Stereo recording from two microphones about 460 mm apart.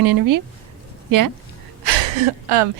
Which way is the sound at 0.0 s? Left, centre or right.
Right.